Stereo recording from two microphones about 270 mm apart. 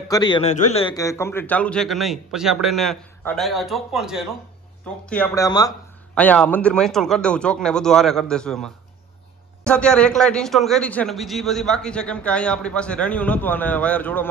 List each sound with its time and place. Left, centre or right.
0.1 s a man's voice: centre
5.1 s a man's voice: centre